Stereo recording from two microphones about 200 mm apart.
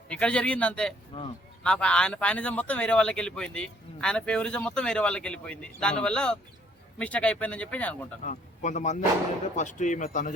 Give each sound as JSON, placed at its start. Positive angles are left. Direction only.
{"t": 0.1, "sound": "speech", "side_deg": 5}
{"t": 8.3, "sound": "speech", "side_deg": 35}